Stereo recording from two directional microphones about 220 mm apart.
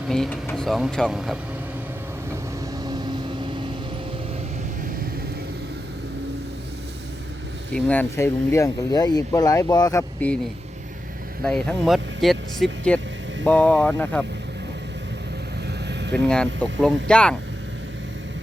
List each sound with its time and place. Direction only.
0.1 s speech: 5° left (ahead or behind)
2.8 s vehicle: 20° right (ahead or behind)
7.7 s speech: 5° left (ahead or behind)
11.4 s speech: 5° left (ahead or behind)
15.9 s vehicle: 50° right (ahead or behind)
16.1 s speech: 5° left (ahead or behind)